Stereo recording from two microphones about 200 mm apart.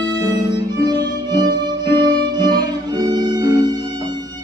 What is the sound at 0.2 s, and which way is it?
Music, 20° right (ahead or behind).